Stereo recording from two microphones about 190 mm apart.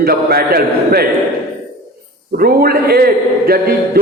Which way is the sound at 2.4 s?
50° right (ahead or behind).